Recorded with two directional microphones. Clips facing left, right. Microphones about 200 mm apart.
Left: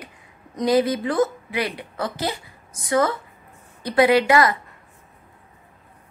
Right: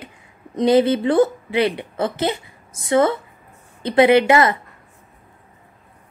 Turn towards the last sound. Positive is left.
turn(degrees=-25)  # may be behind; listen again after turning